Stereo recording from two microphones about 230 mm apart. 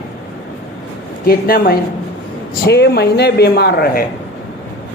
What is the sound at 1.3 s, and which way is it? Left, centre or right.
A man's voice, left.